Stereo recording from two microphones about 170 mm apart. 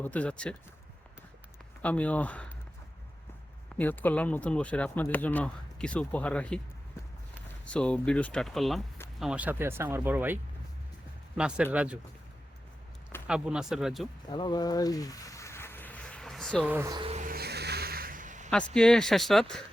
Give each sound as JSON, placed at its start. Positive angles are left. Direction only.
{"t": 0.0, "sound": "speech", "side_deg": 10}
{"t": 1.8, "sound": "speech", "side_deg": 10}
{"t": 3.8, "sound": "speech", "side_deg": 10}
{"t": 7.6, "sound": "speech", "side_deg": 5}
{"t": 13.2, "sound": "speech", "side_deg": -5}
{"t": 14.3, "sound": "a sound", "side_deg": 25}
{"t": 16.6, "sound": "speech", "side_deg": -10}
{"t": 16.9, "sound": "a sound", "side_deg": -30}
{"t": 17.2, "sound": "vehicle", "side_deg": -60}
{"t": 18.7, "sound": "speech", "side_deg": 5}